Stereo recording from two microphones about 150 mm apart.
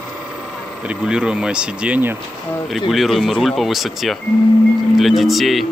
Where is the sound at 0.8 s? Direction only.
5° right (ahead or behind).